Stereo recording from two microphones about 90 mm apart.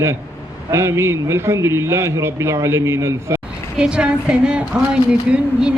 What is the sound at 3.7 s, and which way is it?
A woman's voice, 10° right (ahead or behind).